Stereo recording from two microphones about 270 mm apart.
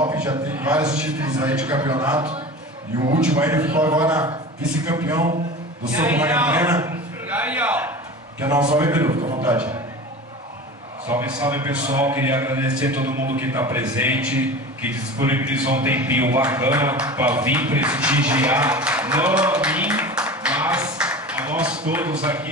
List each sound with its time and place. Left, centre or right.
0.0 s a man's voice: centre
3.3 s a man's voice: centre
11.1 s a man's voice: centre